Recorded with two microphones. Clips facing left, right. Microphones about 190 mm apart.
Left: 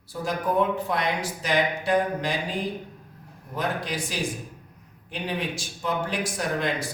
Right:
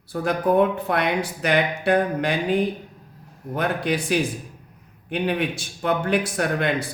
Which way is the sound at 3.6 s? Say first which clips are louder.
Right 5 dB; 60° right (ahead or behind).